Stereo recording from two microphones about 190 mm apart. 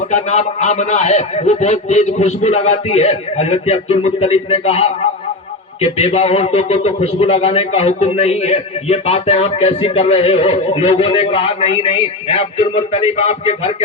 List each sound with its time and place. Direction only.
0.1 s a man's voice: 35° left (ahead or behind)